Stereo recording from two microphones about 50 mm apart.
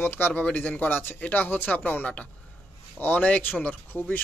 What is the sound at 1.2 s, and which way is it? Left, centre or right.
Speech, left.